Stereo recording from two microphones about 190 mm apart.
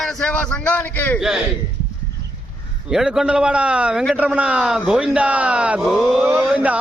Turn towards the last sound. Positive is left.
turn(degrees=-5)  # may be behind; listen again after turning